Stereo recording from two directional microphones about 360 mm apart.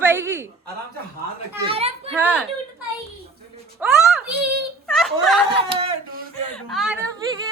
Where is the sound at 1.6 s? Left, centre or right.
Centre.